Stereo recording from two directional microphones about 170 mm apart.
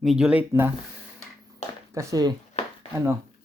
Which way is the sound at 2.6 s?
40° left (ahead or behind).